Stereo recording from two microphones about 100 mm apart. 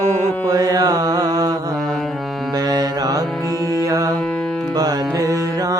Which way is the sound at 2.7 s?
40° right (ahead or behind).